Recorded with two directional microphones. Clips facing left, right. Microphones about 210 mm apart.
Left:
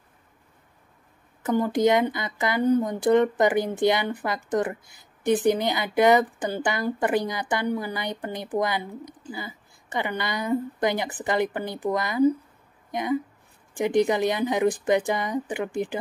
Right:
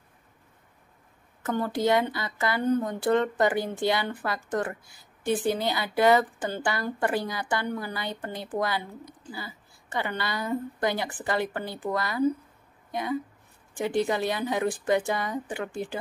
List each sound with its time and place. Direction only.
1.4 s a woman's voice: 15° left (ahead or behind)